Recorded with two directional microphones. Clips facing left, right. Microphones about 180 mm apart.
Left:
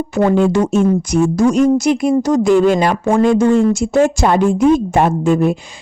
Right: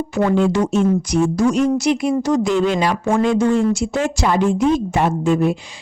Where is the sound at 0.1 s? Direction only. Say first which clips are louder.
Left 4 dB; 45° left (ahead or behind).